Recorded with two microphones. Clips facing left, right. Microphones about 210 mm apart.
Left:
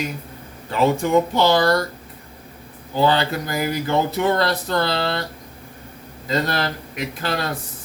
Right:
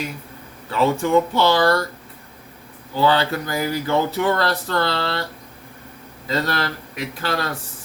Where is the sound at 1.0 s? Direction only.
15° left (ahead or behind).